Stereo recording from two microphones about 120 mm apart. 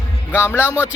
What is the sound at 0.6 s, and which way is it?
Speech, 15° right (ahead or behind).